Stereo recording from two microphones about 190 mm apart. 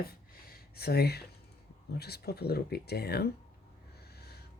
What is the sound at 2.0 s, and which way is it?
Speech, 55° left (ahead or behind).